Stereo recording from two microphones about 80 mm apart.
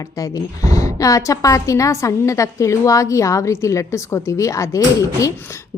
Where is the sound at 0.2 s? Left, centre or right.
Left.